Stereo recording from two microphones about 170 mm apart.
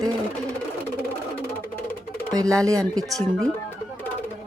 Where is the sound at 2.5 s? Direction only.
20° right (ahead or behind).